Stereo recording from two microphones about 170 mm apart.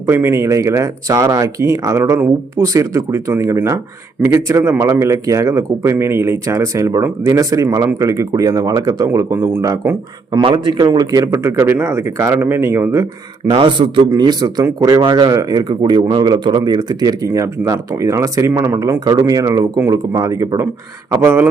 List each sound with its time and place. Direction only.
0.0 s speech: 15° right (ahead or behind)
10.3 s speech: 25° right (ahead or behind)
13.5 s speech: 30° right (ahead or behind); by 21.4 s 10° right (ahead or behind)